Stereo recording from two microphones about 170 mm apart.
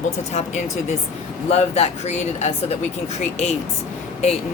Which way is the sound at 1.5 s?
40° left (ahead or behind).